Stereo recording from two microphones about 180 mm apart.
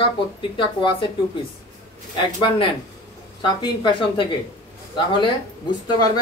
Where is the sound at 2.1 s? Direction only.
25° left (ahead or behind).